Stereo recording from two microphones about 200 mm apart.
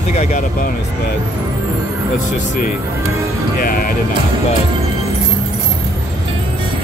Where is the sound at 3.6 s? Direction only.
45° left (ahead or behind).